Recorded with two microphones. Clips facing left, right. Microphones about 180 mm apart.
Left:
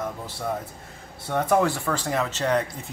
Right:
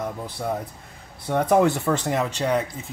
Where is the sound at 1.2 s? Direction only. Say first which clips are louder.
Right 3 dB; 15° right (ahead or behind).